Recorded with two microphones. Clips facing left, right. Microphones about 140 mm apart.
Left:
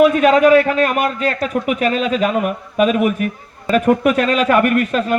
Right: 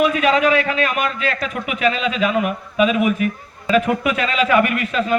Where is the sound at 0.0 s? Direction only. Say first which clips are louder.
Left 5 dB; 45° left (ahead or behind).